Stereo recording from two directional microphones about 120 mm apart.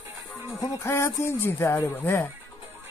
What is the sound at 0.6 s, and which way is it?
Speech, 25° left (ahead or behind).